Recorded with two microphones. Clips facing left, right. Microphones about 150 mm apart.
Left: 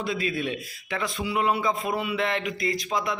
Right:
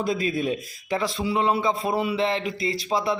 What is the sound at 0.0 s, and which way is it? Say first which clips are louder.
A man's voice: right 3 dB; 45° right (ahead or behind).